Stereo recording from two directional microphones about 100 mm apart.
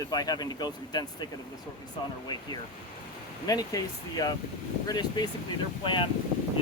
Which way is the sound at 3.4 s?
40° left (ahead or behind).